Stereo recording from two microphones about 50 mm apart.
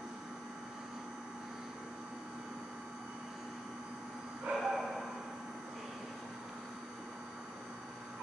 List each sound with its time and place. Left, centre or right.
4.5 s bow-wow: centre